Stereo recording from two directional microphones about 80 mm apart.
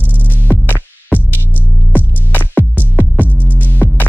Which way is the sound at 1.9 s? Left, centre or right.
Left.